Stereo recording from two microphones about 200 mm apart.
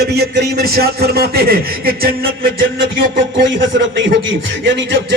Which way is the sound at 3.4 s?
65° right (ahead or behind).